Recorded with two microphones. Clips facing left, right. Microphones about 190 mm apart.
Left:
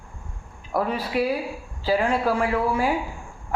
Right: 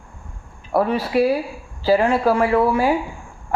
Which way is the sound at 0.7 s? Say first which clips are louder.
Right 6 dB; 65° right (ahead or behind).